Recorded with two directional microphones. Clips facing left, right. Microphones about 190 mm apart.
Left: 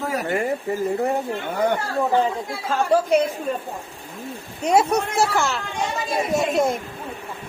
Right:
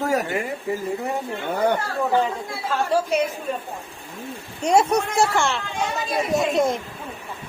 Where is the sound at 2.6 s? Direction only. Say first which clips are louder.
Left 2 dB; 50° left (ahead or behind).